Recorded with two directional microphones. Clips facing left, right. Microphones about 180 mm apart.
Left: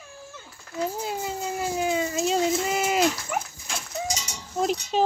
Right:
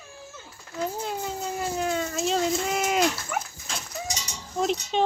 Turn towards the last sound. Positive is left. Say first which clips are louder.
# left 1 dB
turn(degrees=5)  # may be behind; listen again after turning